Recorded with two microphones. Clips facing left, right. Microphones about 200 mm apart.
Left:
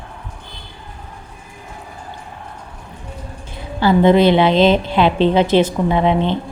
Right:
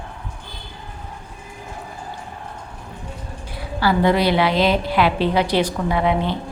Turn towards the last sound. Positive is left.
turn(degrees=20)  # may be behind; listen again after turning